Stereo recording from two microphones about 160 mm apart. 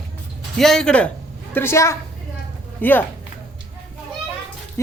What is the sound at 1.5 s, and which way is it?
Speech, 15° left (ahead or behind).